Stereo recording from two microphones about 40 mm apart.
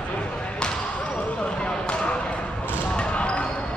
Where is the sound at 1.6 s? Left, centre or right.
Left.